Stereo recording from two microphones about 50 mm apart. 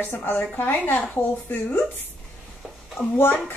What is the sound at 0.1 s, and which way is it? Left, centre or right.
A woman's voice, left.